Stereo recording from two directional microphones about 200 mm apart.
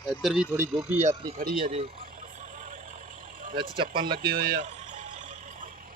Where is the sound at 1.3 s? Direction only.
45° right (ahead or behind).